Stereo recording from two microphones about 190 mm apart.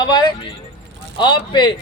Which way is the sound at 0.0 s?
25° left (ahead or behind).